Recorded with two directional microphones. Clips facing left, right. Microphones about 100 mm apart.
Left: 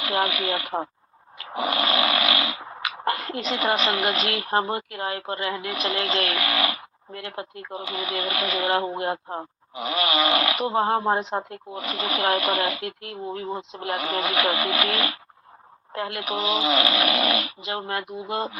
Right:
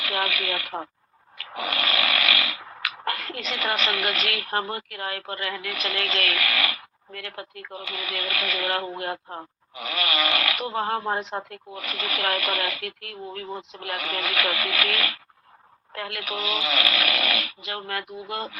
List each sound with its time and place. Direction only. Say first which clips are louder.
0.0 s snoring: left 3 dB; 25° left (ahead or behind)